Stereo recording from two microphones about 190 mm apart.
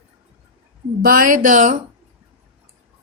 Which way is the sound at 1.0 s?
50° right (ahead or behind).